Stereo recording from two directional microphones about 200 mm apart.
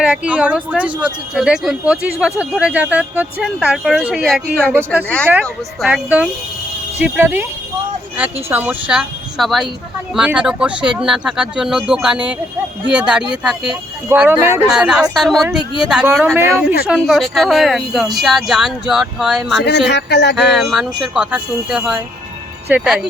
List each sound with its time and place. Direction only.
0.0 s speech: 5° right (ahead or behind)
19.9 s a sound: 60° left (ahead or behind)
20.3 s speech: centre (ahead or behind)